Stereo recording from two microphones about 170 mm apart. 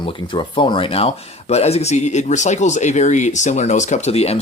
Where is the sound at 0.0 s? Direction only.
30° left (ahead or behind).